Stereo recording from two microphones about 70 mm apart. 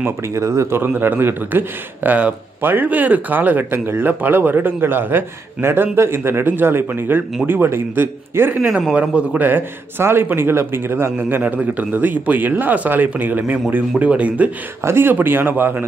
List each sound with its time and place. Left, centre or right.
0.0 s a man's voice: right
9.0 s a man's voice: centre
9.4 s a man's voice: right
14.8 s a man's voice: right